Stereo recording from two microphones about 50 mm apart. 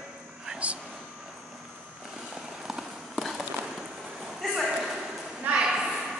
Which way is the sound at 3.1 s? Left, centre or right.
Centre.